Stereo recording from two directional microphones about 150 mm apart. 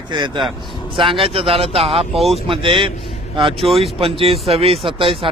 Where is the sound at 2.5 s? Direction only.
35° right (ahead or behind).